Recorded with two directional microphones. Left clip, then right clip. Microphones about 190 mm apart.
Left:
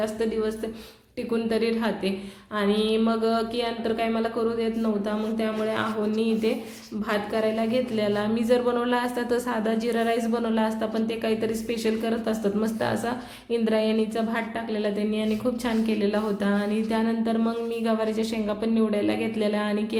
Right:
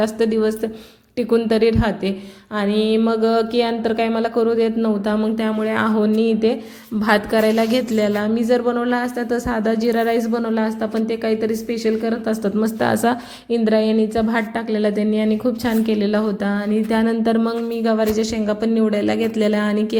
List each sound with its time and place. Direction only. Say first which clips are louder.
0.0 s speech: right 8 dB; 40° right (ahead or behind)
7.0 s a woman's voice: right 9 dB; 45° right (ahead or behind); by 20.0 s 25° right (ahead or behind)